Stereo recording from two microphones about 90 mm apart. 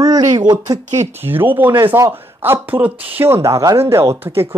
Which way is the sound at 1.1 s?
25° right (ahead or behind).